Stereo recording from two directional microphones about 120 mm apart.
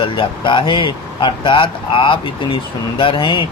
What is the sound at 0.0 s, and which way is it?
Speech, 45° left (ahead or behind).